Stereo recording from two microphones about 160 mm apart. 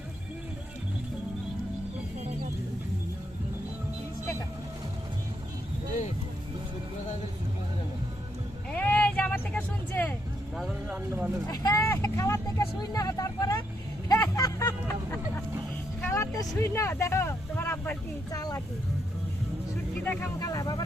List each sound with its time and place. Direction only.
8.7 s vehicle: 10° left (ahead or behind)
10.8 s vehicle: 10° right (ahead or behind)
11.4 s vehicle: 25° left (ahead or behind)
14.1 s a sound: 25° left (ahead or behind)
16.0 s vehicle: 15° left (ahead or behind)
20.4 s speech: 20° left (ahead or behind)